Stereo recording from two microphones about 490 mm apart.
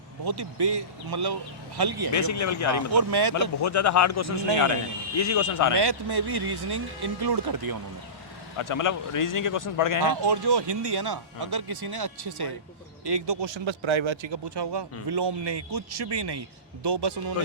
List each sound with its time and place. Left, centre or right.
0.3 s speech: right
2.1 s a man's voice: left
3.1 s speech: right
3.3 s a man's voice: left
5.7 s speech: right
8.5 s a man's voice: left
10.2 s speech: right